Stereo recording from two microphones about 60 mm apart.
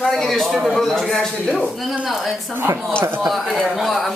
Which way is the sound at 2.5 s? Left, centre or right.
Right.